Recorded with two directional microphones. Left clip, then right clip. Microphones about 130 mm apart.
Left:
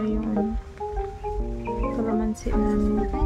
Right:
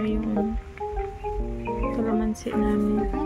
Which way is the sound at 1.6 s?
5° right (ahead or behind).